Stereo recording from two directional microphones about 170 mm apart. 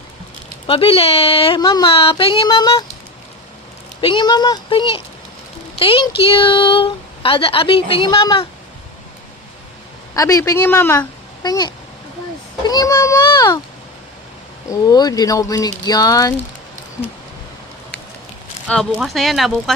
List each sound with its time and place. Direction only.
0.7 s a woman's voice: 35° left (ahead or behind)
4.0 s a woman's voice: 25° left (ahead or behind)
10.2 s a woman's voice: 20° left (ahead or behind)
11.4 s speech: 25° left (ahead or behind)
14.7 s speech: 20° left (ahead or behind)
18.7 s speech: centre (ahead or behind)